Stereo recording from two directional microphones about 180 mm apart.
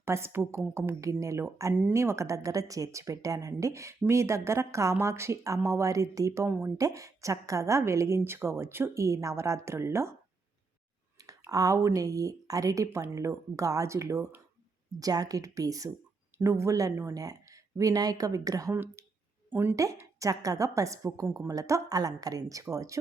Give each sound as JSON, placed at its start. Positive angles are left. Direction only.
{"t": 0.0, "sound": "speech", "side_deg": -15}
{"t": 11.2, "sound": "speech", "side_deg": -20}